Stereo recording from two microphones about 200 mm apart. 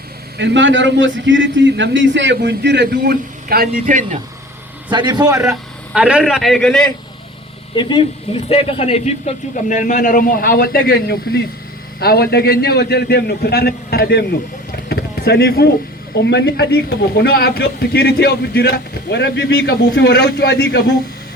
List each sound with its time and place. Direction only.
0.3 s a man's voice: 65° right (ahead or behind); by 4.2 s 40° right (ahead or behind)
4.9 s a man's voice: 20° right (ahead or behind)
5.9 s a man's voice: 5° right (ahead or behind)
7.8 s a man's voice: 25° left (ahead or behind); by 14.3 s 50° left (ahead or behind)
14.8 s a sound: 55° left (ahead or behind)
16.3 s a man's voice: 55° left (ahead or behind)